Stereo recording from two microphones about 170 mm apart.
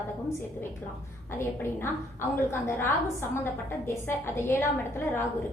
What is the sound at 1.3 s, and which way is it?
A woman's voice, 15° left (ahead or behind).